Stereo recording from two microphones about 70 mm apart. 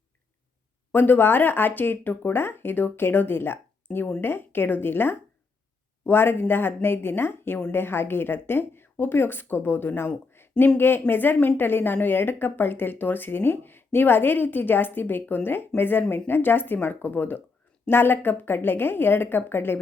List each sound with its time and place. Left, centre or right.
0.9 s a woman's voice: left